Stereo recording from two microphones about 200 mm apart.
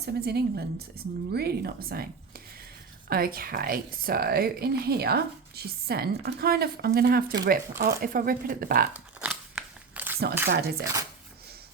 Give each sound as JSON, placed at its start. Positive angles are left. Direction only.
{"t": 0.0, "sound": "a woman's voice", "side_deg": -55}
{"t": 8.9, "sound": "crumpling", "side_deg": -5}
{"t": 10.5, "sound": "a woman's voice", "side_deg": -50}